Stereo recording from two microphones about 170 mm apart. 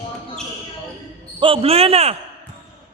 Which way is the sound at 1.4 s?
35° right (ahead or behind).